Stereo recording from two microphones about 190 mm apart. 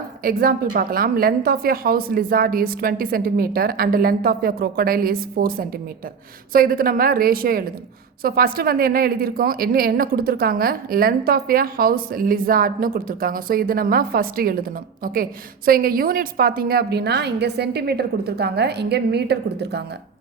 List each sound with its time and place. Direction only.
0.2 s a woman's voice: 50° right (ahead or behind)